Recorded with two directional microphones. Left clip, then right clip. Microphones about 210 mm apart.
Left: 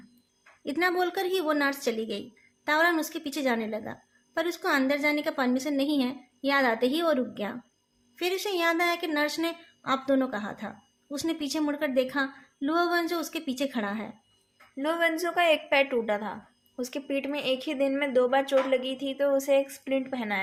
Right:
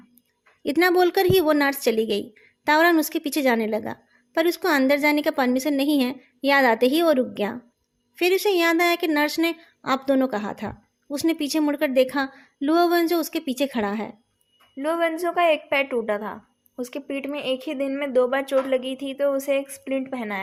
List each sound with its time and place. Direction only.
0.6 s speech: 40° right (ahead or behind)
14.8 s a woman's voice: 15° right (ahead or behind)